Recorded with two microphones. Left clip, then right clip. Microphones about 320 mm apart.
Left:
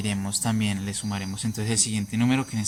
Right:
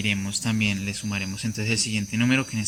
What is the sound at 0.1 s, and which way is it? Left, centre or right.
Speech, left.